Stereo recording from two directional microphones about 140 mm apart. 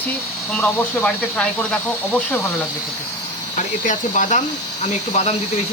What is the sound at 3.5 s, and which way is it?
Speech, 65° left (ahead or behind).